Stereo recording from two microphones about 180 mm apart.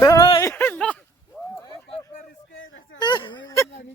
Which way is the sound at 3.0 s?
25° left (ahead or behind).